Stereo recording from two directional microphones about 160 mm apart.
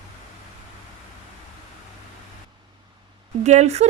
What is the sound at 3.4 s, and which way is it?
Speech, 45° right (ahead or behind).